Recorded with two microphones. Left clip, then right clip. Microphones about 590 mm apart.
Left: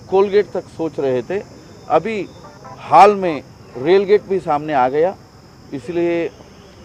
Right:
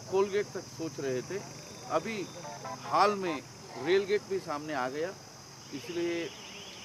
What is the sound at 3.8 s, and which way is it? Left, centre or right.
Speech, left.